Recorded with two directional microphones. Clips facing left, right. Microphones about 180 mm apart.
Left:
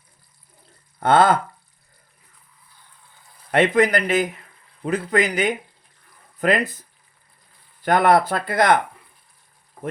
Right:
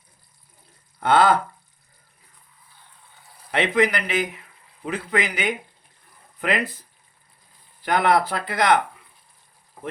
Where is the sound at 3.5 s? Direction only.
45° left (ahead or behind).